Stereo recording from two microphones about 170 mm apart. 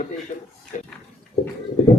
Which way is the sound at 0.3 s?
35° left (ahead or behind).